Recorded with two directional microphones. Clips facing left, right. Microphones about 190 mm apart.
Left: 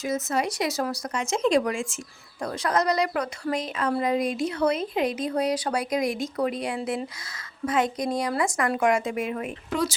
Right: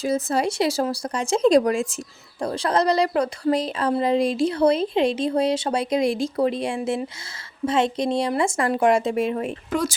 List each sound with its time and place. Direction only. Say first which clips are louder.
0.0 s a woman's voice: right 4 dB; 30° right (ahead or behind)